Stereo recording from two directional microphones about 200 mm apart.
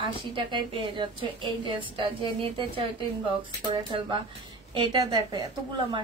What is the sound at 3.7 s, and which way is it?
A woman's voice, 25° right (ahead or behind).